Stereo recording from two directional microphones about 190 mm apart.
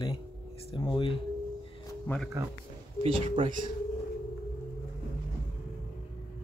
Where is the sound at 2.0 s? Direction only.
5° left (ahead or behind).